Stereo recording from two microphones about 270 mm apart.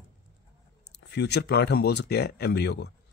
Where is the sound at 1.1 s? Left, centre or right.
Left.